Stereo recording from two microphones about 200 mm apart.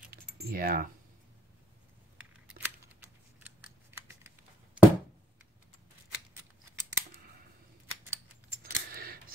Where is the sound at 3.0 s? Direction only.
10° right (ahead or behind).